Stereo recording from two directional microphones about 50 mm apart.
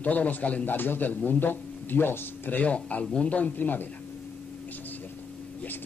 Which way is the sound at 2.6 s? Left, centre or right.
Left.